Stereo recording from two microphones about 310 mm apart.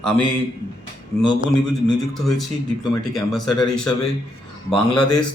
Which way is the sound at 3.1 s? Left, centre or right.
Centre.